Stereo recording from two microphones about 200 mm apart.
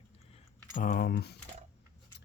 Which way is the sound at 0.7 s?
45° left (ahead or behind).